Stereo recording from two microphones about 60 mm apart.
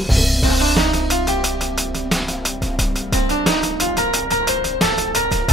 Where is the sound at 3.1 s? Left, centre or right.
Centre.